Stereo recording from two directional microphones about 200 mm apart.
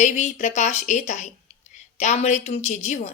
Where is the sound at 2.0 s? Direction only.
35° left (ahead or behind).